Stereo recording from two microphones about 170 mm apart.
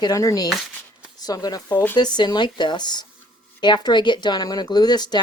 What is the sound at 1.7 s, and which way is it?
Speech, 10° left (ahead or behind).